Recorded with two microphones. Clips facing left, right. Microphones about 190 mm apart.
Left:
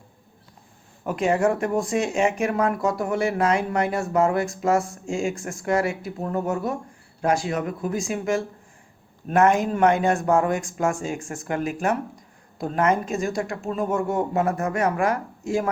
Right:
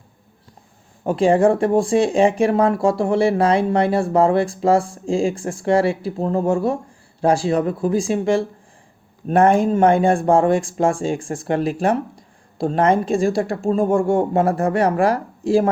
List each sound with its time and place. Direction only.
1.0 s speech: 30° right (ahead or behind)